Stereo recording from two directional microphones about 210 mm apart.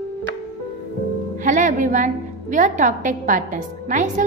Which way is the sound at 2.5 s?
40° right (ahead or behind).